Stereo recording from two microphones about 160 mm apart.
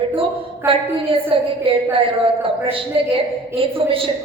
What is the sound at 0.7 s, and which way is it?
A woman's voice, 35° right (ahead or behind).